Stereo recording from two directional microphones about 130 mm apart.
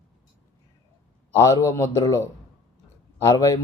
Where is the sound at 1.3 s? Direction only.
25° left (ahead or behind).